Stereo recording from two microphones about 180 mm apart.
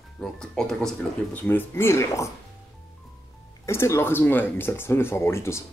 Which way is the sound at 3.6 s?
15° left (ahead or behind).